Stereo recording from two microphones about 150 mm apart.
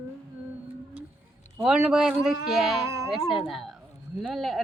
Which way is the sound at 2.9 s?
20° right (ahead or behind).